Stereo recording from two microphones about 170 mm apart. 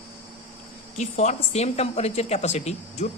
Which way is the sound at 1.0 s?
40° left (ahead or behind).